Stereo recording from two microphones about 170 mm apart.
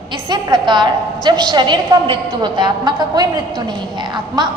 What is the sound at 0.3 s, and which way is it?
A woman's voice, 25° right (ahead or behind).